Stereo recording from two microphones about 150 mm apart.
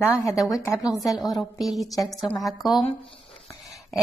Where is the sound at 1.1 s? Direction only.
Centre (ahead or behind).